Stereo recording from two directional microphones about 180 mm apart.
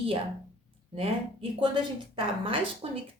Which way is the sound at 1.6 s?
30° right (ahead or behind).